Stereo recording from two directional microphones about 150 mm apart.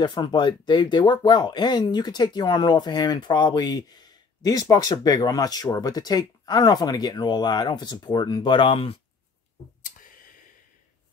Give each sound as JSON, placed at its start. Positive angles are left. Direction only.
{"t": 0.0, "sound": "speech", "side_deg": 30}